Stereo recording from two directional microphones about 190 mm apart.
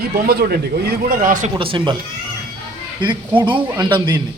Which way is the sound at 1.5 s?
25° right (ahead or behind).